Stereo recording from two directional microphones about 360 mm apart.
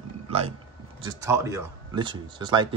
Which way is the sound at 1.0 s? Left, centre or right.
Centre.